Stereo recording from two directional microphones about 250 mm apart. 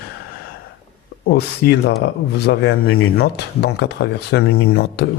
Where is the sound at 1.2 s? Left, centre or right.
Left.